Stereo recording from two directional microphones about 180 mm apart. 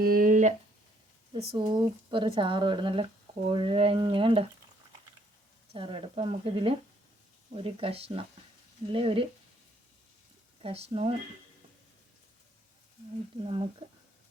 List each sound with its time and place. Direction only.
0.0 s a sound: 50° right (ahead or behind)
1.5 s speech: 25° right (ahead or behind)
5.7 s speech: 30° right (ahead or behind)
10.6 s speech: 35° right (ahead or behind)
13.4 s speech: 30° right (ahead or behind)